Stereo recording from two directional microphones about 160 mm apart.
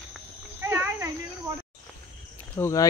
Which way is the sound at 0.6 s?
15° right (ahead or behind).